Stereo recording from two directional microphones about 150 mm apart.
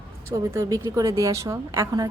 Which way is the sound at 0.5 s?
20° right (ahead or behind).